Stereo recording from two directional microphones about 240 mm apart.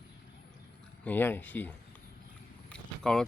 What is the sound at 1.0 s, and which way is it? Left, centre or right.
Speech, centre.